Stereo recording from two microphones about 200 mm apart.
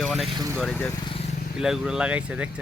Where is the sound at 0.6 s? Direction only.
5° left (ahead or behind).